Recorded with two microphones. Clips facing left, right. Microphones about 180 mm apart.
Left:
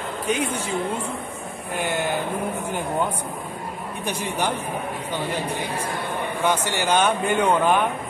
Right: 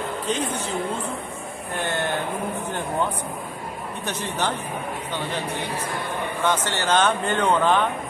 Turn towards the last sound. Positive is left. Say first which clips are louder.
# left 1 dB
turn(degrees=10)  # may be behind; listen again after turning